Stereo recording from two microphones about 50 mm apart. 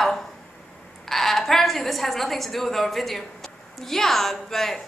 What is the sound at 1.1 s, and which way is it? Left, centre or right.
A woman's voice, centre.